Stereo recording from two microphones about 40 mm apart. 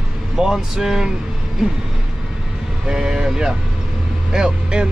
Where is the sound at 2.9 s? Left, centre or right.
Centre.